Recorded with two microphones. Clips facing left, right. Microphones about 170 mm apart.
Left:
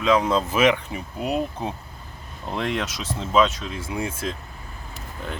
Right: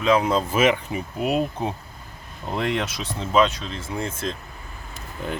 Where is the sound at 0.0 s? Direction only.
Centre (ahead or behind).